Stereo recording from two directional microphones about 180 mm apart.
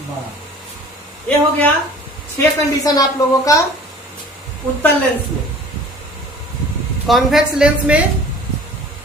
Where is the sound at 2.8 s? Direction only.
20° left (ahead or behind).